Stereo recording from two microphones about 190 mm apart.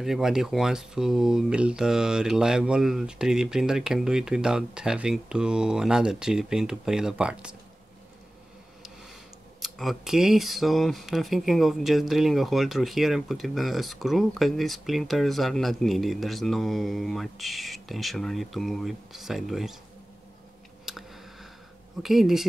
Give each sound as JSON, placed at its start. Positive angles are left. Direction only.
{"t": 0.0, "sound": "speech", "side_deg": 0}
{"t": 9.6, "sound": "speech", "side_deg": 0}
{"t": 20.8, "sound": "a sound", "side_deg": 0}
{"t": 22.0, "sound": "speech", "side_deg": 0}